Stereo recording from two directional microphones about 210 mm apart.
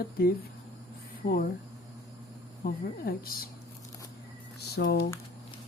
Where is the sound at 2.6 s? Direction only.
45° left (ahead or behind).